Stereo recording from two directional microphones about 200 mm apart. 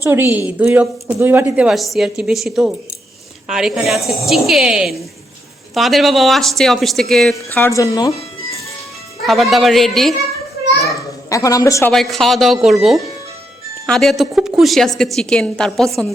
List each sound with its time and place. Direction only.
0.0 s a woman's voice: 10° right (ahead or behind); by 8.1 s 15° left (ahead or behind)
9.2 s speech: centre (ahead or behind)
11.3 s speech: 15° left (ahead or behind)
11.9 s speech: centre (ahead or behind)
13.8 s speech: centre (ahead or behind)